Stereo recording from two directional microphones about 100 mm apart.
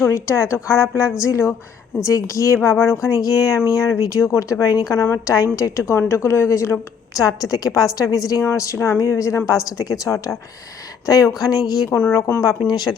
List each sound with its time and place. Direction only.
0.0 s a woman's voice: 30° left (ahead or behind)
11.9 s a woman's voice: 25° left (ahead or behind); by 12.9 s 45° left (ahead or behind)